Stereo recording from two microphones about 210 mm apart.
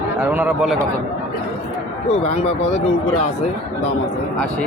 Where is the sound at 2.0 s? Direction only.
30° left (ahead or behind).